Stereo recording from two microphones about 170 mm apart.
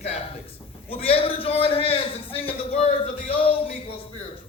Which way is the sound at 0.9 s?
35° left (ahead or behind).